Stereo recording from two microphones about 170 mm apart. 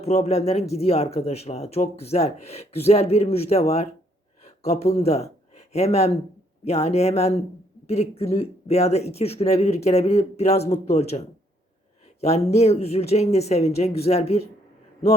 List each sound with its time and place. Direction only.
0.0 s speech: 40° left (ahead or behind)